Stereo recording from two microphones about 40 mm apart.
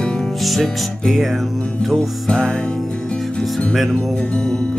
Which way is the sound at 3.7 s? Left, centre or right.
Centre.